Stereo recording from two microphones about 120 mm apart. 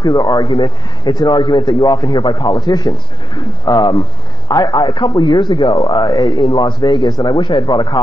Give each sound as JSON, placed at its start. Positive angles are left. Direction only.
{"t": 0.0, "sound": "a man's voice", "side_deg": 35}